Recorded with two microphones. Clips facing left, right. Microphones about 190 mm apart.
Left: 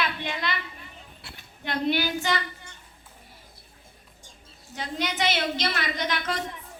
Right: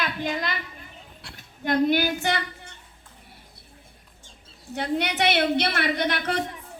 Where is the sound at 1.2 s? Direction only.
Centre (ahead or behind).